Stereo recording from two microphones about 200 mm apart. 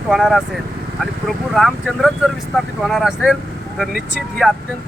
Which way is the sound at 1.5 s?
Centre (ahead or behind).